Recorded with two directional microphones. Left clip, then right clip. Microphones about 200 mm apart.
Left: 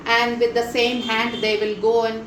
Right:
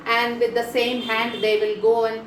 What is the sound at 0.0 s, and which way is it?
A woman's voice, 40° left (ahead or behind).